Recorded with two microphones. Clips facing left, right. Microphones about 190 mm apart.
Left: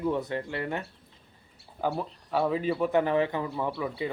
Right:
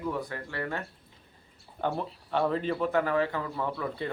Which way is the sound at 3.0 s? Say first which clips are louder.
Left 2 dB; 20° left (ahead or behind).